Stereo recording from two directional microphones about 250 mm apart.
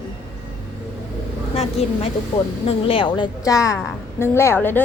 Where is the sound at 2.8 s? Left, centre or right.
Left.